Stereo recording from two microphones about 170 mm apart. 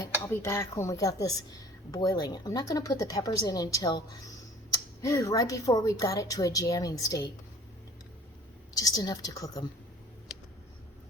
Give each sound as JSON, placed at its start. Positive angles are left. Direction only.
{"t": 0.4, "sound": "speech", "side_deg": 15}
{"t": 8.7, "sound": "speech", "side_deg": 20}